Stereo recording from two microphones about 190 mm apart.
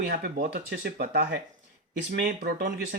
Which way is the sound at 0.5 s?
60° right (ahead or behind).